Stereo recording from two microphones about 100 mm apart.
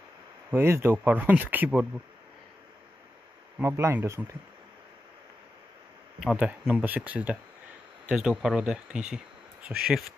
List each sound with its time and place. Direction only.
0.5 s speech: 25° right (ahead or behind)
3.6 s speech: 25° right (ahead or behind)
6.3 s speech: 10° right (ahead or behind)